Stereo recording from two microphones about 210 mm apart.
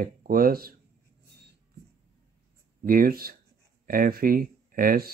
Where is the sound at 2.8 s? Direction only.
40° right (ahead or behind).